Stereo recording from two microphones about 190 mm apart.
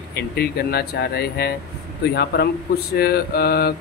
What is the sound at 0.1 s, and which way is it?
A man's voice, 55° left (ahead or behind).